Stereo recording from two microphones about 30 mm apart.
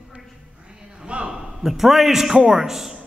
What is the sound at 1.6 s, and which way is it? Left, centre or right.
A man's voice, centre.